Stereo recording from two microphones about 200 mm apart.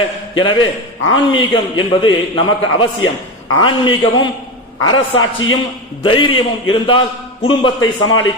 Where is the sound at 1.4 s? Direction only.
25° left (ahead or behind).